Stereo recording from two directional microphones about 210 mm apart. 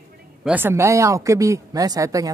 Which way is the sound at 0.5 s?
10° right (ahead or behind).